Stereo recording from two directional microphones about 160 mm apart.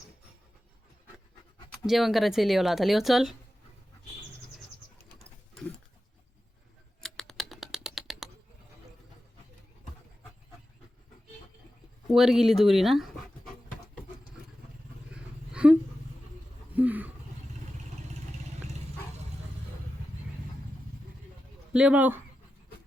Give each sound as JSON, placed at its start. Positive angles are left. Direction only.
{"t": 1.9, "sound": "speech", "side_deg": 0}
{"t": 7.0, "sound": "typing", "side_deg": 5}
{"t": 12.0, "sound": "speech", "side_deg": 0}
{"t": 15.1, "sound": "a sound", "side_deg": -5}
{"t": 21.7, "sound": "speech", "side_deg": -5}